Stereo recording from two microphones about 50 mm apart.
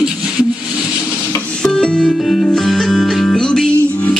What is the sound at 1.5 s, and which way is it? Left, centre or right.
Music, centre.